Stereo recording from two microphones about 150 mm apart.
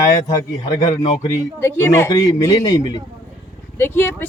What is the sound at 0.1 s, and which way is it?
Speech, 25° left (ahead or behind).